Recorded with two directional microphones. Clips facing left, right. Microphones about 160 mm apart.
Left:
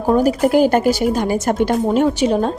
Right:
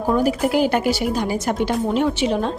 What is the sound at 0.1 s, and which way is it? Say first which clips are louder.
Speech: left 5 dB; 40° left (ahead or behind).